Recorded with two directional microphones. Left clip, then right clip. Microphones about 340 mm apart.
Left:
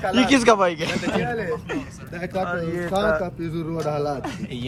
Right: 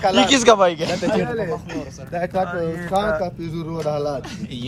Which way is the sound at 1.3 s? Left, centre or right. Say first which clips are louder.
Right 2 dB; right.